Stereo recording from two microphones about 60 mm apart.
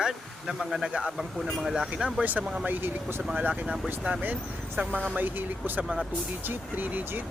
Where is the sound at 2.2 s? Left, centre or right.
Right.